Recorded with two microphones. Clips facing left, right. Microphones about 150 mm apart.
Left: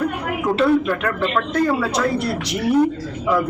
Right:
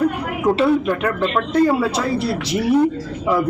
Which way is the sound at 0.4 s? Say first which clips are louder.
Right 1 dB; 10° right (ahead or behind).